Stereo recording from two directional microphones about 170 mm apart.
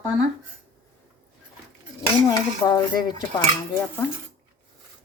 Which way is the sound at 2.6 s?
25° left (ahead or behind).